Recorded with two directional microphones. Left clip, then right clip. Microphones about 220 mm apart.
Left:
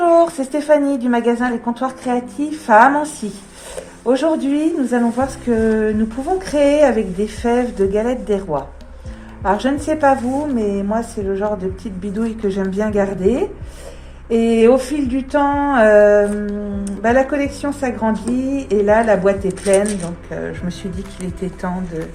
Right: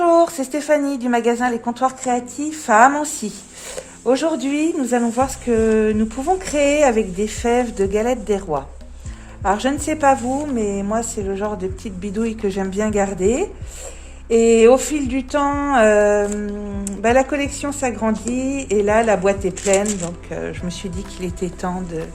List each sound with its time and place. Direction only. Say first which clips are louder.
0.0 s a woman's voice: left 2 dB; 40° right (ahead or behind)